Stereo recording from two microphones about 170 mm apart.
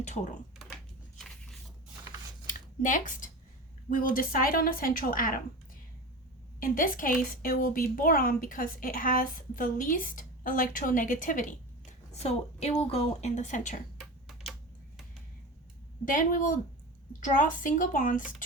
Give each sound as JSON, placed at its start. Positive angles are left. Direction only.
{"t": 0.0, "sound": "speech", "side_deg": 45}
{"t": 2.5, "sound": "a sound", "side_deg": 50}
{"t": 3.8, "sound": "a woman's voice", "side_deg": 55}
{"t": 6.6, "sound": "a woman's voice", "side_deg": 55}
{"t": 12.1, "sound": "a woman's voice", "side_deg": 40}
{"t": 14.0, "sound": "typing", "side_deg": 0}
{"t": 16.1, "sound": "a woman's voice", "side_deg": 50}